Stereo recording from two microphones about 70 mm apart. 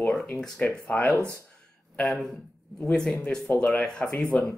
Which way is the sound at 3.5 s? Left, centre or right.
Centre.